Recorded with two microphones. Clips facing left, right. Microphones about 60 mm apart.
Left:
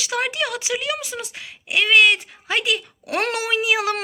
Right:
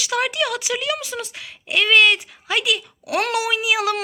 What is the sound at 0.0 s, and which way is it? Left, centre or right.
Speech, left.